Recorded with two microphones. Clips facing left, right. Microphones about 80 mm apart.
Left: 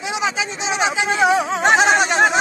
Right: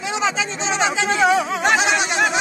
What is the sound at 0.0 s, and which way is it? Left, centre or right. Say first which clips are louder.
Speech: even; centre.